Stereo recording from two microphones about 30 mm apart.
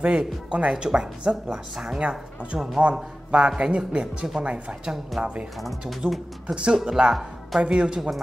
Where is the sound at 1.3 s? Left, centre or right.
Right.